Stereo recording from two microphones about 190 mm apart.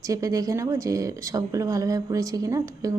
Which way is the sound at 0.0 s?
15° right (ahead or behind).